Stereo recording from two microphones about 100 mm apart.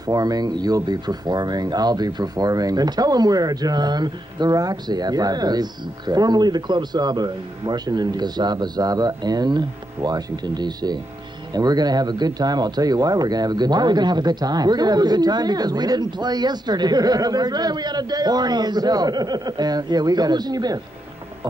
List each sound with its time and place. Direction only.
0.0 s speech: 40° right (ahead or behind)